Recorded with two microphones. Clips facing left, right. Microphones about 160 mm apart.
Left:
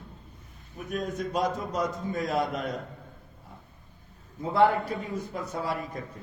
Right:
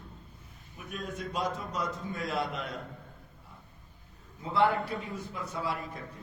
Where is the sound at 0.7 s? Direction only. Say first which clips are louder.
Left 7 dB; 45° left (ahead or behind).